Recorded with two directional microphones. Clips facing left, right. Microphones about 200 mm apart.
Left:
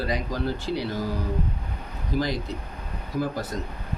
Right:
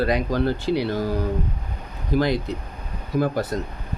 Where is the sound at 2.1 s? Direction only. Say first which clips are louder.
Right 5 dB; 65° right (ahead or behind).